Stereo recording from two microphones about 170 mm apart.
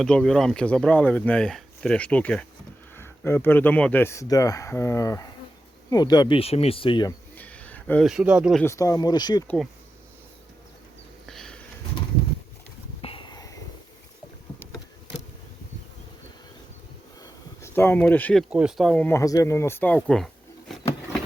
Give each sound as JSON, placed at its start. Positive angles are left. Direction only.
{"t": 0.0, "sound": "speech", "side_deg": 5}
{"t": 7.3, "sound": "a sound", "side_deg": 10}
{"t": 8.0, "sound": "speech", "side_deg": -5}
{"t": 8.6, "sound": "speech", "side_deg": 20}
{"t": 11.3, "sound": "sniff", "side_deg": 5}
{"t": 13.0, "sound": "a sound", "side_deg": 30}
{"t": 17.6, "sound": "speech", "side_deg": 10}
{"t": 18.5, "sound": "speech", "side_deg": 0}